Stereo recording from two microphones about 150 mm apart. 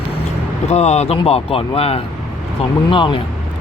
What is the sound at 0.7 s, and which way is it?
Speech, 45° left (ahead or behind).